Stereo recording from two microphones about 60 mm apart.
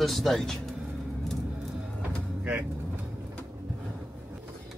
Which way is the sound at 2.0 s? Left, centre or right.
Right.